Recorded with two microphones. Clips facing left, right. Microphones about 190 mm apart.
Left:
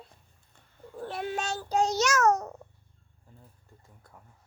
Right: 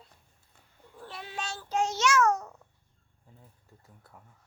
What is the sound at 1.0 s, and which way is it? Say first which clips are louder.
Child singing: left 7 dB; 50° left (ahead or behind).